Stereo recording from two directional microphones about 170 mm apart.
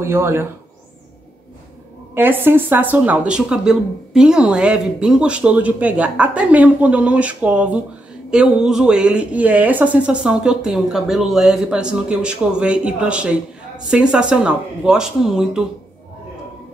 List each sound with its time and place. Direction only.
0.0 s speech: 15° right (ahead or behind)
2.1 s speech: 10° right (ahead or behind)